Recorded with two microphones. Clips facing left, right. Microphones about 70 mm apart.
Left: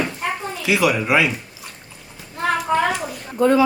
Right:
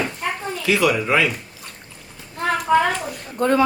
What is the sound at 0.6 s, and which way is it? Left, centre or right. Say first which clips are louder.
Speech: even; centre.